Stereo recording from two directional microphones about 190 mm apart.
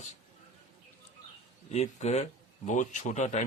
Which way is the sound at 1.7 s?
35° left (ahead or behind).